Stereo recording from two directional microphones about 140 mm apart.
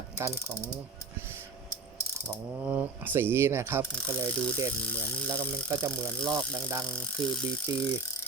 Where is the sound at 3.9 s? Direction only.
10° left (ahead or behind).